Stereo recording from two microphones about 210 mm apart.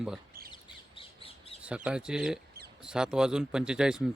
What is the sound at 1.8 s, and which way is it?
Speech, 5° right (ahead or behind).